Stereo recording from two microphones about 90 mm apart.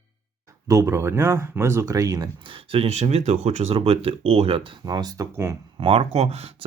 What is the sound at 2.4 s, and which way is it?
Speech, 80° right.